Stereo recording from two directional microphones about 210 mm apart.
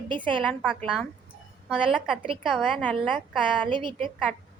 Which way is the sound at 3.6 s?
25° right (ahead or behind).